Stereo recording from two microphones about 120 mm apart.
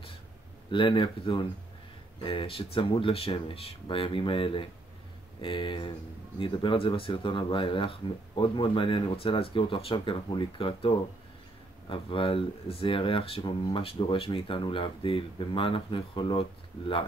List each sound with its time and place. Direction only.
0.7 s speech: 45° left (ahead or behind)